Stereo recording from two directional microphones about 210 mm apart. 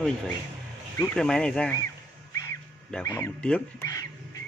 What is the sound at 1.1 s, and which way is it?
Speech, 5° left (ahead or behind).